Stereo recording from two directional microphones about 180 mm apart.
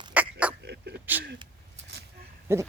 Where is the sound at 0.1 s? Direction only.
5° right (ahead or behind).